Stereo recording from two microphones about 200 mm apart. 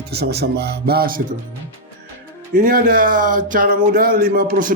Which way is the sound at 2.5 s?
45° right (ahead or behind).